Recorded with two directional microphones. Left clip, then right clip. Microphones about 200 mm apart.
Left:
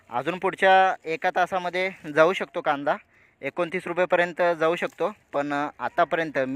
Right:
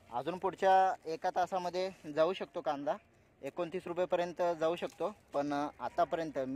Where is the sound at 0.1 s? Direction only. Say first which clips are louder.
Left 10 dB; 20° left (ahead or behind).